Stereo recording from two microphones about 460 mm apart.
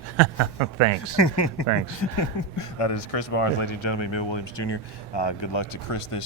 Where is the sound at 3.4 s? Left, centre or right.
Left.